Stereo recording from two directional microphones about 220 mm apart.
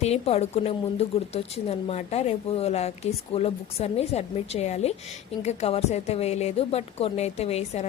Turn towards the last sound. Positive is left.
turn(degrees=30)  # may be behind; listen again after turning